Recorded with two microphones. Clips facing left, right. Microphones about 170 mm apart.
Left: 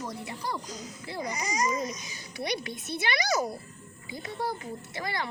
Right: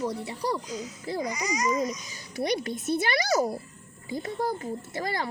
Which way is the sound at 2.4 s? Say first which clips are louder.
Right 5 dB; 45° right (ahead or behind).